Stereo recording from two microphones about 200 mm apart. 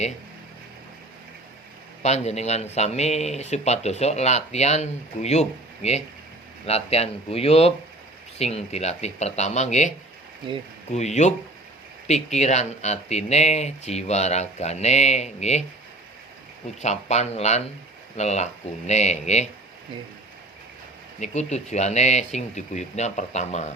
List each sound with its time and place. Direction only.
2.0 s speech: 35° left (ahead or behind)
10.9 s speech: 35° left (ahead or behind)
16.8 s speech: 35° left (ahead or behind)
21.2 s speech: 35° left (ahead or behind)